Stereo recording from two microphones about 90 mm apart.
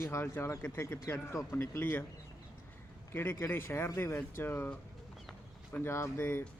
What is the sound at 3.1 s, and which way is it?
Speech, 25° left (ahead or behind).